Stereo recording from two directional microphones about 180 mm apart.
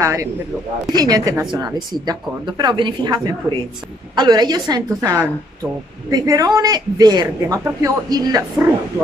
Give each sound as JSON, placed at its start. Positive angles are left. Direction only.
{"t": 0.0, "sound": "a man's voice", "side_deg": -15}